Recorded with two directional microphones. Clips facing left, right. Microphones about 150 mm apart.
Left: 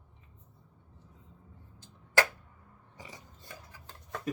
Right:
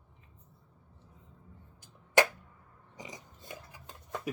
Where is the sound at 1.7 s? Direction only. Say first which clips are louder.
Right 2 dB; 20° right (ahead or behind).